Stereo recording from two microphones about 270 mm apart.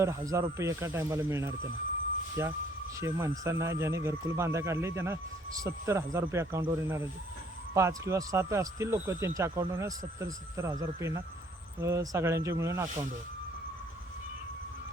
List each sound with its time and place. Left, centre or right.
0.0 s speech: centre